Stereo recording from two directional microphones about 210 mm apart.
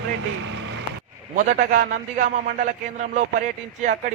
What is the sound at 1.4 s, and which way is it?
A man's voice, 40° right (ahead or behind).